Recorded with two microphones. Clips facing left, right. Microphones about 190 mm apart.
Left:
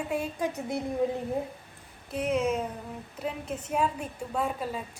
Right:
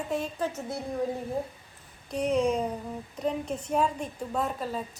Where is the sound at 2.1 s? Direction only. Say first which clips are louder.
Right 2 dB; 35° right (ahead or behind).